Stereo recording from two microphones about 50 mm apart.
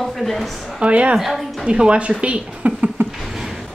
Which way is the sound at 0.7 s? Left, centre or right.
Right.